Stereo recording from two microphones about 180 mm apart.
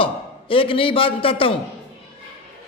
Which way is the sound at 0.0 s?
30° left (ahead or behind).